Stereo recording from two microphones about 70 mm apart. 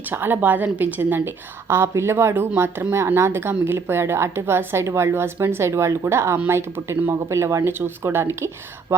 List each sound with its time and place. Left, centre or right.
0.1 s a woman's voice: right